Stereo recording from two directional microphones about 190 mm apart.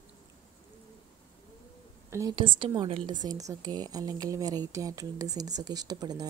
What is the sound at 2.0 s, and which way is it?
A woman's voice, 15° right (ahead or behind).